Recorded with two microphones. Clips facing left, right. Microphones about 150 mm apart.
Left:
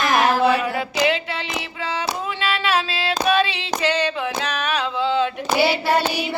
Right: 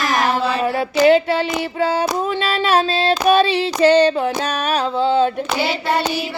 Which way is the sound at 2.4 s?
40° right (ahead or behind).